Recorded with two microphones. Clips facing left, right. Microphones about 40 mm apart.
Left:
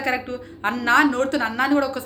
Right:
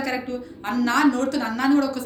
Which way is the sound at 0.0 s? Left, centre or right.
Left.